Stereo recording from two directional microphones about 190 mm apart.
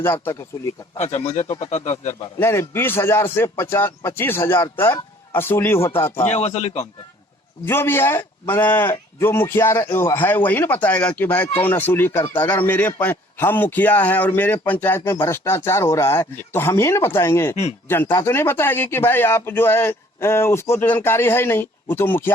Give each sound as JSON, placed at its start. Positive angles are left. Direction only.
{"t": 0.0, "sound": "a man's voice", "side_deg": 15}
{"t": 0.9, "sound": "speech", "side_deg": 35}
{"t": 2.4, "sound": "a man's voice", "side_deg": 15}
{"t": 6.2, "sound": "speech", "side_deg": 35}
{"t": 7.6, "sound": "a man's voice", "side_deg": 10}
{"t": 17.5, "sound": "speech", "side_deg": 35}
{"t": 17.8, "sound": "a man's voice", "side_deg": 10}